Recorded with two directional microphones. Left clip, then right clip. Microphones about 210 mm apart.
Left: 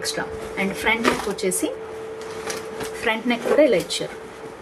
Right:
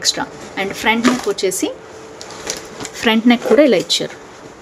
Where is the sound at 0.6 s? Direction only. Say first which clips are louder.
Right 5 dB; 45° right (ahead or behind).